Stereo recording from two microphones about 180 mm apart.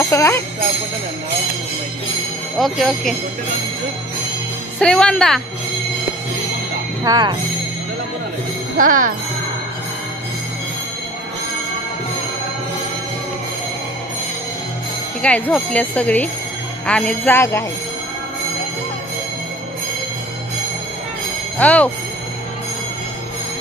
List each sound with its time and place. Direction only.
0.0 s speech: 15° left (ahead or behind)
2.6 s speech: centre (ahead or behind)
4.7 s speech: 5° left (ahead or behind)
7.1 s speech: 25° right (ahead or behind)
8.7 s speech: 50° right (ahead or behind)
15.2 s speech: 5° left (ahead or behind)
21.5 s speech: 10° left (ahead or behind)